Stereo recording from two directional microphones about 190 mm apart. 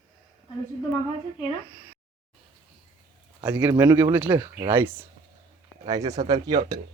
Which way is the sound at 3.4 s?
10° right (ahead or behind).